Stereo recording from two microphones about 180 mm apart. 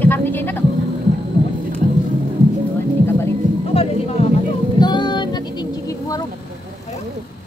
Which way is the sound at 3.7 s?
35° left (ahead or behind).